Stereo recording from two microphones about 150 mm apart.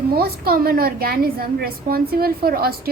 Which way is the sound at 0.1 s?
90° right.